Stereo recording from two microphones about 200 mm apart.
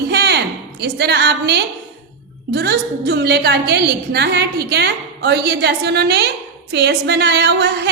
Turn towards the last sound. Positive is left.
turn(degrees=-55)  # may be behind; listen again after turning